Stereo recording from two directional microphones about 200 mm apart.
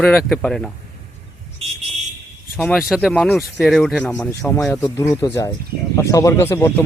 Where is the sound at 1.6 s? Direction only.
30° right (ahead or behind).